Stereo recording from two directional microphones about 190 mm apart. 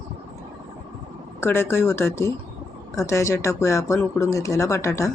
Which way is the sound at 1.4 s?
15° left (ahead or behind).